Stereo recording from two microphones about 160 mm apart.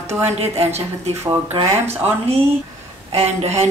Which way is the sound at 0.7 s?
45° right (ahead or behind).